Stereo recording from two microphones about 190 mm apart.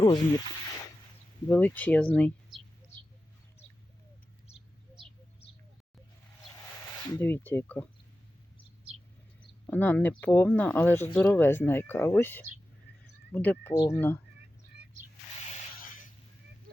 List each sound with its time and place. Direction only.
1.5 s speech: 10° left (ahead or behind)
7.1 s speech: 10° left (ahead or behind)
9.6 s speech: 10° left (ahead or behind)
15.4 s a sound: 45° left (ahead or behind)